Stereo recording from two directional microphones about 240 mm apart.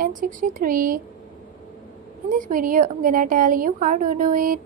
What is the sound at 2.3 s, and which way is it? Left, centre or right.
A woman's voice, right.